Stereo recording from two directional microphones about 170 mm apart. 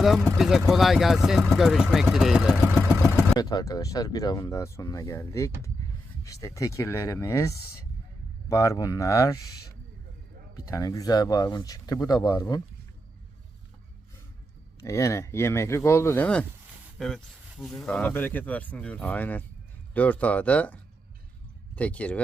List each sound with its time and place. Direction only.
0.0 s speech: centre (ahead or behind)
3.2 s speech: 20° left (ahead or behind)
10.5 s speech: 20° left (ahead or behind)
14.8 s speech: 15° left (ahead or behind)
21.8 s speech: 10° left (ahead or behind)